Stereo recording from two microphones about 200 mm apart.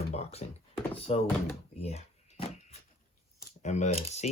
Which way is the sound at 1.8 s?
30° left (ahead or behind).